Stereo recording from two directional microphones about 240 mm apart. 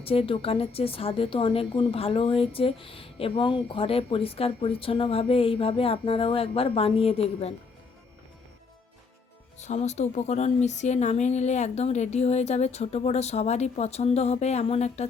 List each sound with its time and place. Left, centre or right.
0.0 s a woman's voice: left
9.6 s a woman's voice: left